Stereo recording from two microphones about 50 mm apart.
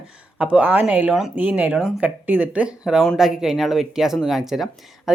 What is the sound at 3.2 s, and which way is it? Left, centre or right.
Speech, centre.